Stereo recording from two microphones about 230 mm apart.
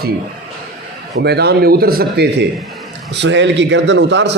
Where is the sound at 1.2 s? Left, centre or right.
Right.